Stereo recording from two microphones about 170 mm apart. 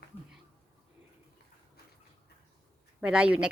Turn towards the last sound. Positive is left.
turn(degrees=-5)  # may be behind; listen again after turning